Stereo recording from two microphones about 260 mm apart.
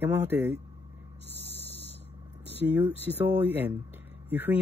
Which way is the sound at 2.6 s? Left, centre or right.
Centre.